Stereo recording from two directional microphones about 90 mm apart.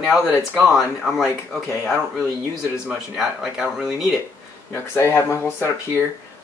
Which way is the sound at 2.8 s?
5° right (ahead or behind).